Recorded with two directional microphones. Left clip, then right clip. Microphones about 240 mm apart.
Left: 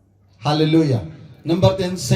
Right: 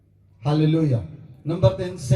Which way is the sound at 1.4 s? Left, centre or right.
Left.